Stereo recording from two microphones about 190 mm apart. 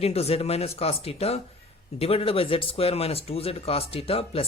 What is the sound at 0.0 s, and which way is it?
Speech, 35° left (ahead or behind).